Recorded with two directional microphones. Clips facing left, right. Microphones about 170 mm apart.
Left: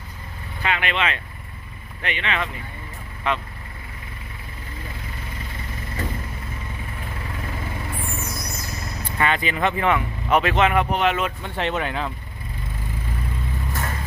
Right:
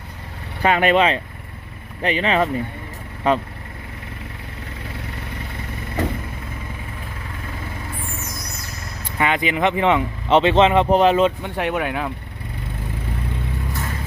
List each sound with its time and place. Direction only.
0.6 s speech: 40° right (ahead or behind)
9.1 s speech: 15° right (ahead or behind); by 11.3 s 35° right (ahead or behind)
11.4 s speech: 10° right (ahead or behind)